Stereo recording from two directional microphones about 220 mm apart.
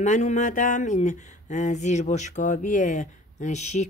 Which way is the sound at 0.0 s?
35° left (ahead or behind).